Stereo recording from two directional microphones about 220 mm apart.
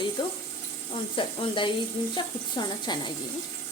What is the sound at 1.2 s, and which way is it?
Speech, 20° left (ahead or behind).